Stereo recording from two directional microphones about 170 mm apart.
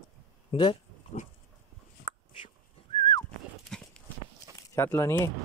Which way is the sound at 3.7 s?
5° left (ahead or behind).